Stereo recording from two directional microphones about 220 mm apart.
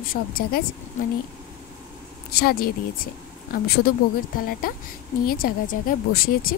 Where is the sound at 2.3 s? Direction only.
45° left (ahead or behind).